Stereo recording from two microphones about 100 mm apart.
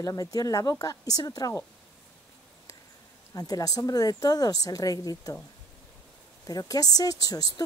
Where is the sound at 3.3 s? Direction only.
40° left (ahead or behind).